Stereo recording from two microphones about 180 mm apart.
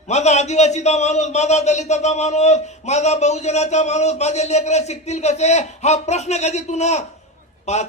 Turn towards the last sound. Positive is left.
turn(degrees=40)  # may be behind; listen again after turning